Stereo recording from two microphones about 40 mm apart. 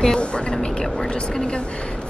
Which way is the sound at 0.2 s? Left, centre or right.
Left.